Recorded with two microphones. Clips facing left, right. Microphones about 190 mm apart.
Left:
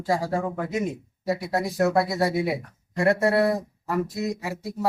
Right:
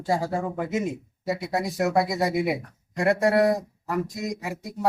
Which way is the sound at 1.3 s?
Centre (ahead or behind).